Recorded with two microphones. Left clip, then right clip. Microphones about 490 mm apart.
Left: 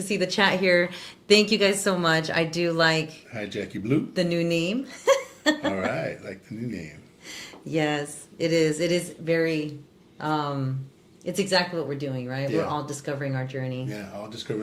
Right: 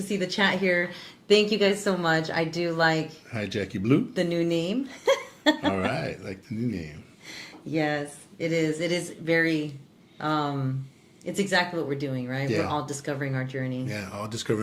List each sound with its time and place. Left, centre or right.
0.1 s speech: centre
3.3 s speech: right
4.2 s speech: centre
5.7 s speech: right
7.3 s speech: centre
13.9 s speech: right